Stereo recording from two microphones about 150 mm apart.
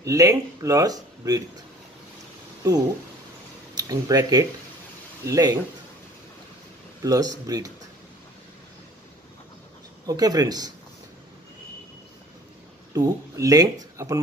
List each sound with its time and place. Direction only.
0.0 s speech: 20° right (ahead or behind)
3.7 s speech: 25° right (ahead or behind)
7.0 s speech: 25° right (ahead or behind)
10.0 s speech: 25° right (ahead or behind)
12.9 s speech: 25° right (ahead or behind)